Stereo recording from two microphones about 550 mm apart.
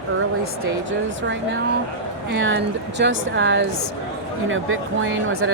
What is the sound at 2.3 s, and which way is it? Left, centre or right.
Speech, centre.